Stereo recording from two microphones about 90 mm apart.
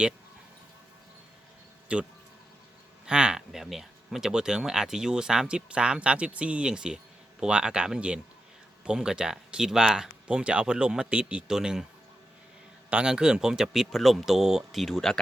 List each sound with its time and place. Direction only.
1.9 s speech: 10° right (ahead or behind)
3.1 s speech: 10° right (ahead or behind)
12.9 s speech: 10° right (ahead or behind)